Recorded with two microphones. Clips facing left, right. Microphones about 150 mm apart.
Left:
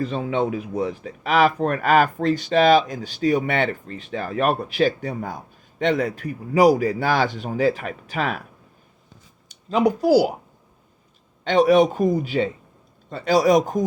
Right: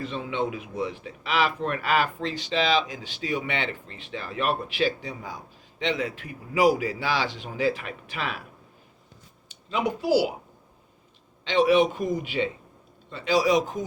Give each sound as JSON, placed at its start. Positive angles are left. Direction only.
{"t": 0.0, "sound": "speech", "side_deg": 40}
{"t": 9.5, "sound": "speech", "side_deg": 40}
{"t": 11.4, "sound": "a man's voice", "side_deg": 45}